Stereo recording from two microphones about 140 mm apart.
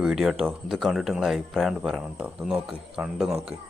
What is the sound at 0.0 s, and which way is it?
Speech, centre (ahead or behind).